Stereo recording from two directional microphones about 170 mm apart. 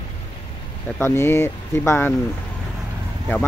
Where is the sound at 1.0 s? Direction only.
15° left (ahead or behind).